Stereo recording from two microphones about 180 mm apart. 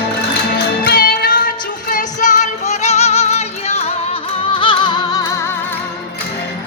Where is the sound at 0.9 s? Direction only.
60° left (ahead or behind).